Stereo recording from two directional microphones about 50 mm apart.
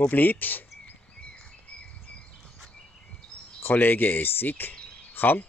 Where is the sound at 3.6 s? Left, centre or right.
Left.